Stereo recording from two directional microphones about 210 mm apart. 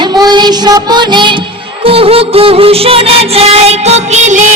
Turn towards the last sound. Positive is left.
turn(degrees=-35)  # may be behind; listen again after turning